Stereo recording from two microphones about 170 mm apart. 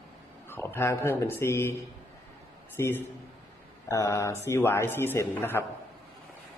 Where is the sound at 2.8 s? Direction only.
15° left (ahead or behind).